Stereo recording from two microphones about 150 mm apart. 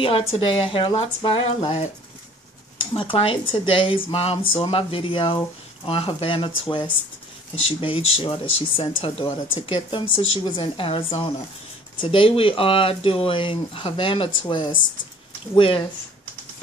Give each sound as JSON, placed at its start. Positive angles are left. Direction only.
{"t": 0.0, "sound": "speech", "side_deg": 40}